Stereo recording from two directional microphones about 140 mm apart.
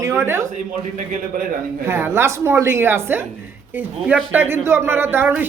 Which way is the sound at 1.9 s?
15° right (ahead or behind).